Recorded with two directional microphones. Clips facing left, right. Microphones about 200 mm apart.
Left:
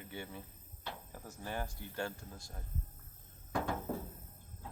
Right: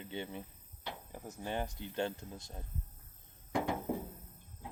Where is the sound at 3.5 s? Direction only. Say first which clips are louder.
Right 2 dB; 15° right (ahead or behind).